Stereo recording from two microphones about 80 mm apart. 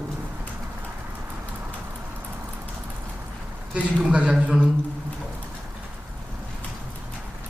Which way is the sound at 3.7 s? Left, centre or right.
Centre.